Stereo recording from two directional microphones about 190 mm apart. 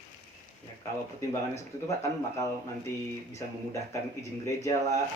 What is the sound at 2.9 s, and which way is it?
Speech, 15° left (ahead or behind).